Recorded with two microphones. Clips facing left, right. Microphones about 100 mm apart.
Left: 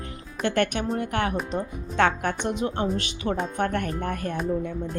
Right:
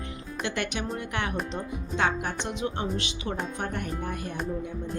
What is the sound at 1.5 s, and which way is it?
Speech, 55° left (ahead or behind).